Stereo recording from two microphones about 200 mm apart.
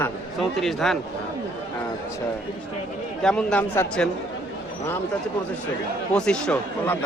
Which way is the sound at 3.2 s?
5° left (ahead or behind).